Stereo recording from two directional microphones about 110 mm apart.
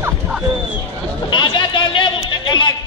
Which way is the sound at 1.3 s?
45° left (ahead or behind).